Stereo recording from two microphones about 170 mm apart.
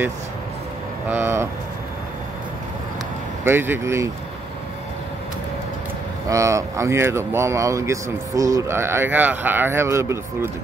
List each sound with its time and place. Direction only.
1.0 s speech: 10° right (ahead or behind)
3.4 s speech: 15° right (ahead or behind)
6.2 s speech: 20° right (ahead or behind)